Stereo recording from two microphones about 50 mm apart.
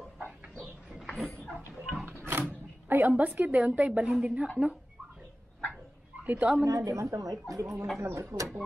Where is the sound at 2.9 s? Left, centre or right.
Right.